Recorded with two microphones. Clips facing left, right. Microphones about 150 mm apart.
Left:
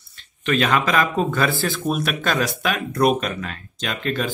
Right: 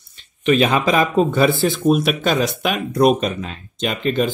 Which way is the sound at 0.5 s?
15° right (ahead or behind).